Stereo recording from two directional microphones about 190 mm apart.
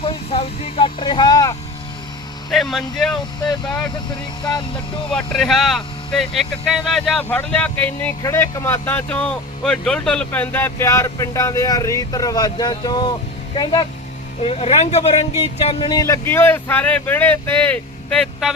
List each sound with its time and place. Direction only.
0.0 s speech: 30° left (ahead or behind)
2.5 s speech: centre (ahead or behind)
5.1 s speech: 5° left (ahead or behind)